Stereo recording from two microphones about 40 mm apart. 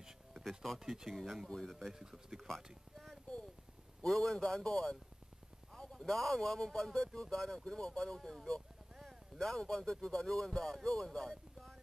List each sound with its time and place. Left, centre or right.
0.7 s speech: centre
1.0 s speech: centre
2.0 s speech: centre
2.4 s speech: centre
9.4 s speech: centre